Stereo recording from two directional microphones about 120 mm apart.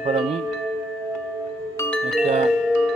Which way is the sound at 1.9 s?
5° left (ahead or behind).